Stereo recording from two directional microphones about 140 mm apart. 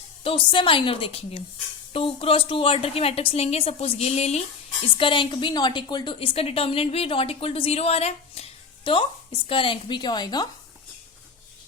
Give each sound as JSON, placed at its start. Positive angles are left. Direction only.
{"t": 0.2, "sound": "a woman's voice", "side_deg": 35}
{"t": 4.9, "sound": "a woman's voice", "side_deg": 35}